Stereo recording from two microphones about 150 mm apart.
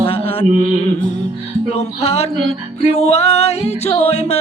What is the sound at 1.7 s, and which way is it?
Music, 45° left (ahead or behind).